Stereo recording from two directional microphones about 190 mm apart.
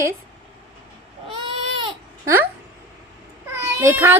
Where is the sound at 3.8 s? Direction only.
10° right (ahead or behind).